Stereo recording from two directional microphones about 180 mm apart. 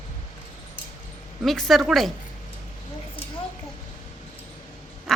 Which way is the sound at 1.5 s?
Centre (ahead or behind).